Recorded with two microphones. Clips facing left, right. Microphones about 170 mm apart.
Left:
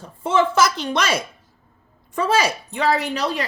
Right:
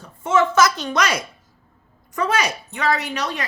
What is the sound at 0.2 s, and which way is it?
A woman's voice, 30° left (ahead or behind).